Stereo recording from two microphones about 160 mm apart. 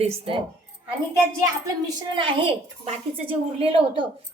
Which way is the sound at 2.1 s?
35° right (ahead or behind).